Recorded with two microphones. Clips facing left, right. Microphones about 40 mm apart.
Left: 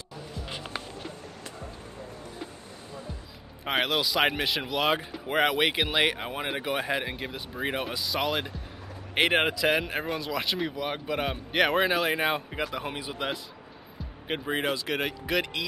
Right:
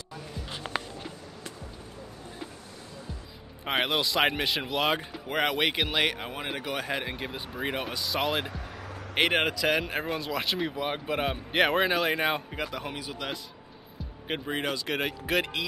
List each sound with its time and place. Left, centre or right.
3.6 s speech: centre
12.7 s speech: centre
14.2 s speech: centre